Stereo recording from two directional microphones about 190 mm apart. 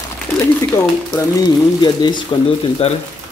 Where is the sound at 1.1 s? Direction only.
20° left (ahead or behind).